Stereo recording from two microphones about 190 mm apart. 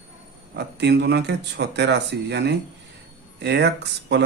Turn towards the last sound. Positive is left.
turn(degrees=-65)  # may be behind; listen again after turning